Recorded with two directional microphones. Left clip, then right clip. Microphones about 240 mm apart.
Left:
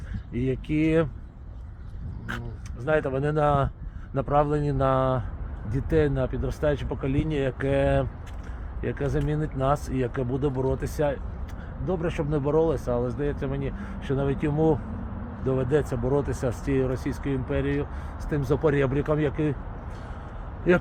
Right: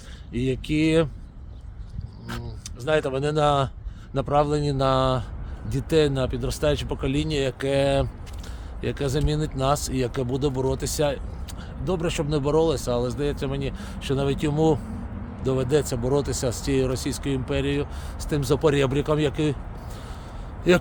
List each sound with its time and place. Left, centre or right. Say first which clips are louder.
0.3 s speech: right 2 dB; right
2.8 s speech: right 2 dB; centre
14.5 s speech: right 2 dB; centre
15.4 s speech: right 2 dB; centre